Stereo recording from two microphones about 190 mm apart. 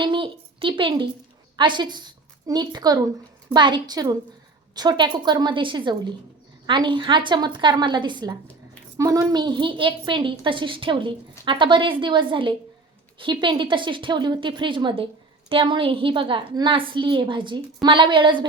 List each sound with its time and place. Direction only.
0.0 s a woman's voice: 25° right (ahead or behind)